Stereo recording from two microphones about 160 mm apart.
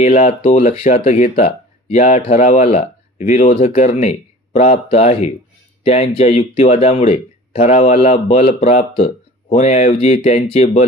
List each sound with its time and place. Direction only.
0.2 s speech: 45° left (ahead or behind)